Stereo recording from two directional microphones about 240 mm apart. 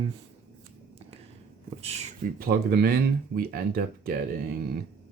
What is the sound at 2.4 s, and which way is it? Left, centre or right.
Speech, right.